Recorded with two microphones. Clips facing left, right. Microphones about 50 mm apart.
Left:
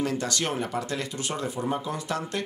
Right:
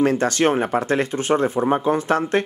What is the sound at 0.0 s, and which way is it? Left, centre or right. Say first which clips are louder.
Speech: right 10 dB; right.